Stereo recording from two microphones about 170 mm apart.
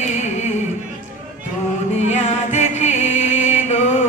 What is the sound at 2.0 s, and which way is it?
Music, 40° left (ahead or behind).